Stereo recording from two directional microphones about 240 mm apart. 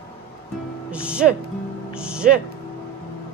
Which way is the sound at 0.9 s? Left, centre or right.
Centre.